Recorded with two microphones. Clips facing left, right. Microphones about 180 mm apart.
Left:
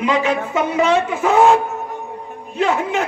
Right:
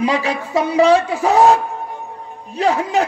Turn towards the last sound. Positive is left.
turn(degrees=-35)  # may be behind; listen again after turning